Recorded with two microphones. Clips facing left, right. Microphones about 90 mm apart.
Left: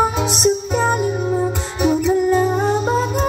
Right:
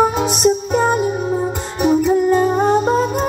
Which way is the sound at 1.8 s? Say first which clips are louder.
Right 2 dB; 40° right (ahead or behind).